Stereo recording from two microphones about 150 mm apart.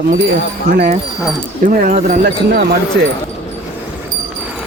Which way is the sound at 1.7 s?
55° right (ahead or behind).